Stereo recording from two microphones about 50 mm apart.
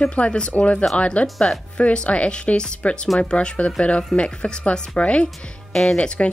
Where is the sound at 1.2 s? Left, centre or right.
Centre.